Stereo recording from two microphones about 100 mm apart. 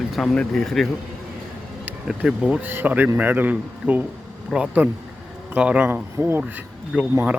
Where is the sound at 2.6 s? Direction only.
20° right (ahead or behind).